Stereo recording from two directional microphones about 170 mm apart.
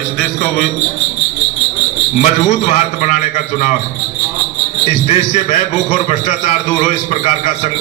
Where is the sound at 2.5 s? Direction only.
45° left (ahead or behind).